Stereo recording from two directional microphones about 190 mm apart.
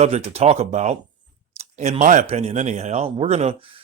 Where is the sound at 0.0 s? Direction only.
35° right (ahead or behind).